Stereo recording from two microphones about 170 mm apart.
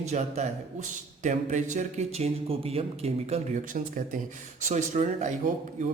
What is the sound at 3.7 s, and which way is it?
Speech, 50° right (ahead or behind).